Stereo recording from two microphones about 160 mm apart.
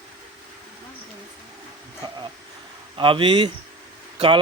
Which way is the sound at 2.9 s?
35° right (ahead or behind).